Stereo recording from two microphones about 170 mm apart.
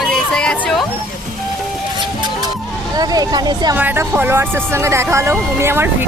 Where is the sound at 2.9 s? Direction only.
20° right (ahead or behind).